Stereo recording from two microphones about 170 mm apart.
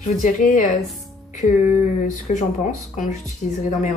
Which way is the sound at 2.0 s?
50° left (ahead or behind).